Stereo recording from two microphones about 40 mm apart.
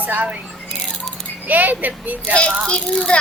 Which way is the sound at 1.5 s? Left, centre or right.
Right.